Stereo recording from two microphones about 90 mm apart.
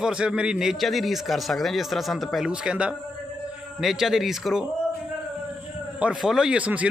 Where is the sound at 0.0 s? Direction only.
10° right (ahead or behind).